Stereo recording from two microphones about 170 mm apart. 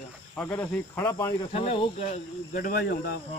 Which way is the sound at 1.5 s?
35° left (ahead or behind).